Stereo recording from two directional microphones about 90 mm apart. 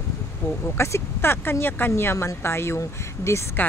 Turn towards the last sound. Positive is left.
turn(degrees=30)  # may be behind; listen again after turning